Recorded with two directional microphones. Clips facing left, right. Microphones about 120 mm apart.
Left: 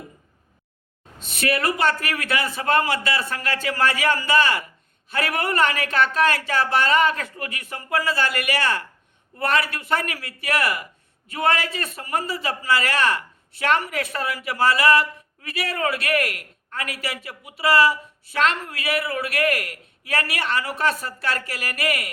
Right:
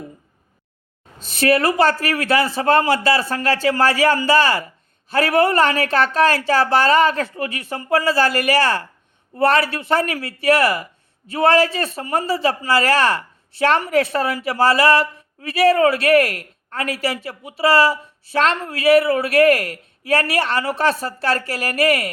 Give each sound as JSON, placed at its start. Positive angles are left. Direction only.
{"t": 1.2, "sound": "a man's voice", "side_deg": -35}